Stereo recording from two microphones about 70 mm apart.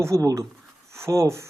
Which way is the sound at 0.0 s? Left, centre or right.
Right.